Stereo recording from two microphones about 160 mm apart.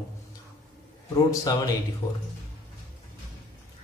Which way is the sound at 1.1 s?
20° left (ahead or behind).